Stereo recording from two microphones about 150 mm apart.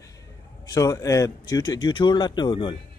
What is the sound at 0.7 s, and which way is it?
Speech, 25° left (ahead or behind).